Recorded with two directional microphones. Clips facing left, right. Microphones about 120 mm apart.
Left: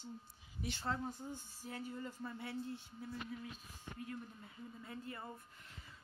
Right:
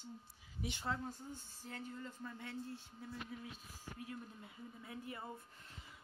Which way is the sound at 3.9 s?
10° right (ahead or behind).